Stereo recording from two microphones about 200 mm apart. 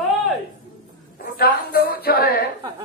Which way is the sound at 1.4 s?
50° left (ahead or behind).